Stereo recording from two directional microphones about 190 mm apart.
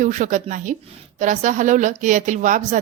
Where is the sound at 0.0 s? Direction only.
40° right (ahead or behind).